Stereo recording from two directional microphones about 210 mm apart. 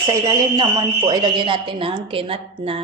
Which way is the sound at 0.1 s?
20° right (ahead or behind).